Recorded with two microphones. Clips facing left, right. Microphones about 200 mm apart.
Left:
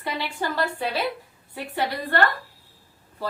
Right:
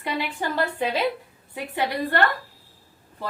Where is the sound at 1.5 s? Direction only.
15° right (ahead or behind).